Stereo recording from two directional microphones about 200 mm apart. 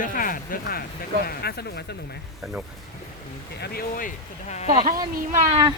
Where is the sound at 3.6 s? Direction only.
50° left (ahead or behind).